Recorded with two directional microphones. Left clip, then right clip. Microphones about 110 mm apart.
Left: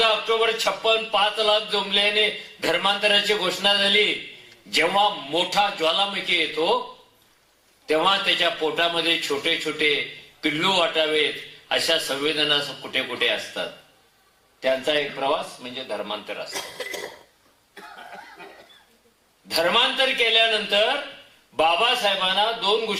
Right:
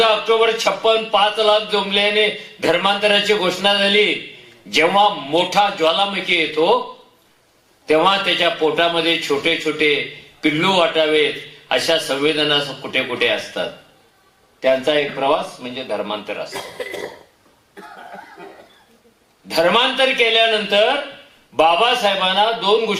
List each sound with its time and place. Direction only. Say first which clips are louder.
0.0 s speech: right 6 dB; 15° right (ahead or behind)
17.7 s cough: right 4 dB; 20° right (ahead or behind)
19.5 s speech: right 5 dB; 10° right (ahead or behind)